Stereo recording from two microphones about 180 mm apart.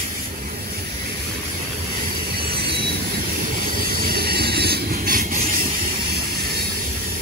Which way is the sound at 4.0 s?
55° right (ahead or behind).